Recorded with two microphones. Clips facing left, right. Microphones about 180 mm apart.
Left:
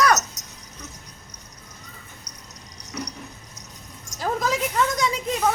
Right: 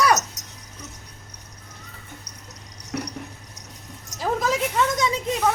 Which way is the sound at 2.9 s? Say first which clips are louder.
Right 3 dB; 70° right (ahead or behind).